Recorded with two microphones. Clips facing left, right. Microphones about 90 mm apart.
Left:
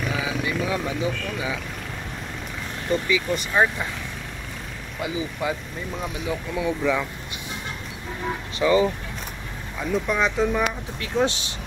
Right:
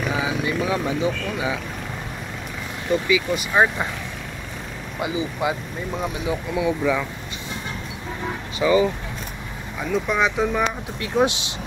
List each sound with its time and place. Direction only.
0.1 s vehicle: 25° right (ahead or behind)
2.9 s speech: 5° right (ahead or behind)
5.0 s speech: 20° right (ahead or behind)
8.5 s speech: 10° right (ahead or behind)
10.0 s speech: 5° right (ahead or behind)